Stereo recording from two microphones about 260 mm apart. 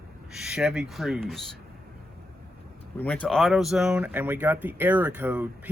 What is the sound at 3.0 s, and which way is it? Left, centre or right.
Speech, centre.